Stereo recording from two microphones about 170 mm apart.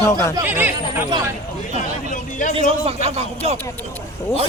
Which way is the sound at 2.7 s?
35° right (ahead or behind).